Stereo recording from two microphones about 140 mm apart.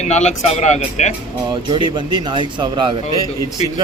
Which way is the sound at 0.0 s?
55° left (ahead or behind).